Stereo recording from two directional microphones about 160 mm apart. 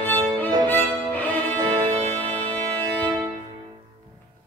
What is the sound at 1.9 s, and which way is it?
Music, 10° left (ahead or behind).